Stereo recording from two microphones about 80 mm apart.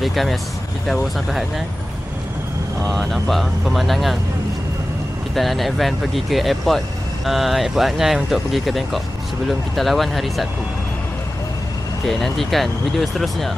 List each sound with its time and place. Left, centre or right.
0.0 s speech: centre
2.8 s speech: centre
5.3 s speech: centre
12.1 s speech: centre